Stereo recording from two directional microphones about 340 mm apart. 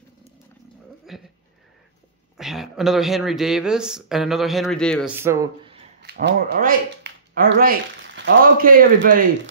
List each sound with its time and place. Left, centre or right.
1.1 s a sound: centre
2.3 s speech: centre
6.0 s speech: right